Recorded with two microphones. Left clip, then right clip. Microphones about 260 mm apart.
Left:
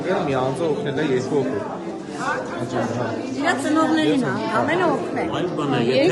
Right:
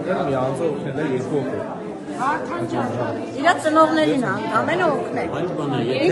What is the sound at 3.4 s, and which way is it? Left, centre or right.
Speech, centre.